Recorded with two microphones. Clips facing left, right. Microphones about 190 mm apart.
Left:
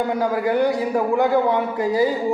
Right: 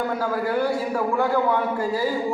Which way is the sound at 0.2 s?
20° left (ahead or behind).